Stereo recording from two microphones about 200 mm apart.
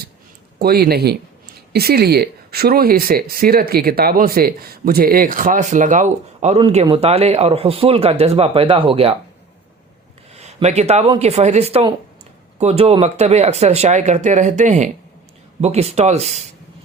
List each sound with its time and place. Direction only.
0.6 s speech: 50° right (ahead or behind); by 9.1 s 30° right (ahead or behind)
10.3 s speech: 35° right (ahead or behind)